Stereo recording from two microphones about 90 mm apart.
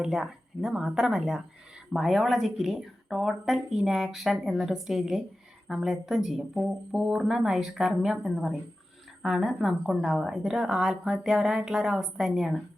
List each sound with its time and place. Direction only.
0.0 s a woman's voice: 5° right (ahead or behind)